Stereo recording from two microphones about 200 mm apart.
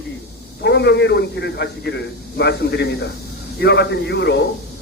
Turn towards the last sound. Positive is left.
turn(degrees=60)  # may be behind; listen again after turning